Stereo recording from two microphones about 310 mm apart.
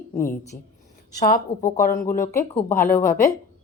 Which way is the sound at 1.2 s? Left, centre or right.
Left.